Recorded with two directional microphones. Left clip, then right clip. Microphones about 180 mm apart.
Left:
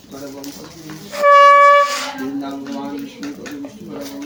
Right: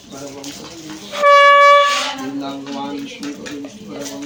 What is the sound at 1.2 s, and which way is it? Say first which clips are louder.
Wind instrument: even; 35° right (ahead or behind).